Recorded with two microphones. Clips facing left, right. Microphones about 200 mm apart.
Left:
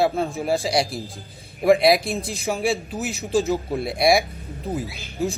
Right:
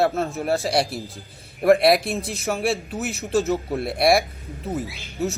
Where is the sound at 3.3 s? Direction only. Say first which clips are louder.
Even; 30° left (ahead or behind).